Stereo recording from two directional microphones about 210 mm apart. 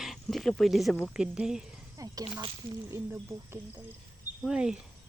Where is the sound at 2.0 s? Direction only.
15° right (ahead or behind).